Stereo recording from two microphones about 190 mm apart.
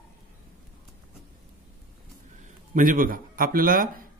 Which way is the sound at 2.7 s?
45° right (ahead or behind).